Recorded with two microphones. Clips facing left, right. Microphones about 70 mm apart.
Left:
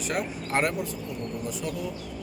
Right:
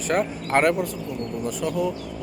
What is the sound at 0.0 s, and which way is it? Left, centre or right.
Speech, right.